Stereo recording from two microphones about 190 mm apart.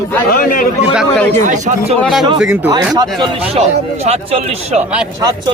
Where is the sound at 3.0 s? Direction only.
25° right (ahead or behind).